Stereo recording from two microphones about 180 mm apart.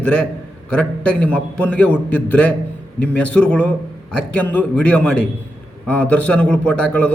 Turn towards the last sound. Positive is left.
turn(degrees=5)  # may be behind; listen again after turning